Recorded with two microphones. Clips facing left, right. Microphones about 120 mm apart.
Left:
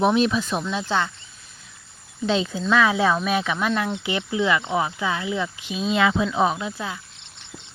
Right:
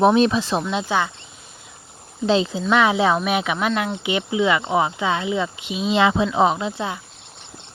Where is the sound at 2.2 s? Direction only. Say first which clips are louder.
Right 4 dB; 35° right (ahead or behind).